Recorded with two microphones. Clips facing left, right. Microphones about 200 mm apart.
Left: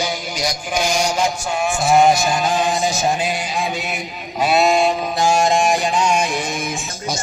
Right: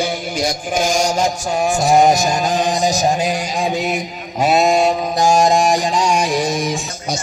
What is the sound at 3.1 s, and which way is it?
Speech, 40° right (ahead or behind).